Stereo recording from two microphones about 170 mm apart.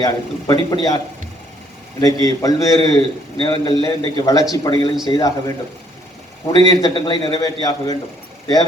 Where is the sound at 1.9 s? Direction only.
20° left (ahead or behind).